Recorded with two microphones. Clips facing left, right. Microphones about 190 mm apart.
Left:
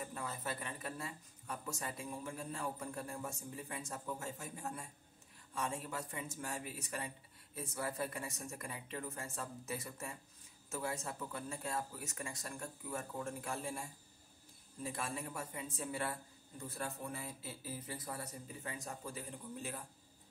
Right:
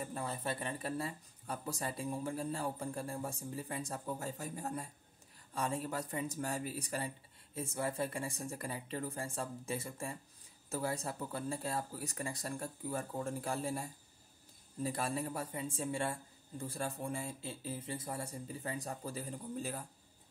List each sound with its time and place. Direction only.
0.0 s speech: 30° right (ahead or behind)